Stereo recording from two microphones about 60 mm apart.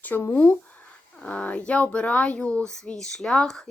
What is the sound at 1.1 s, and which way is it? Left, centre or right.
Speech, centre.